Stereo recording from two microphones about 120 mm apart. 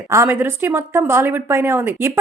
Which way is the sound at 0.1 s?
20° right (ahead or behind).